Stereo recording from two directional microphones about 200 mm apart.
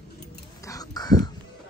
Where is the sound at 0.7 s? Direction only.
20° left (ahead or behind).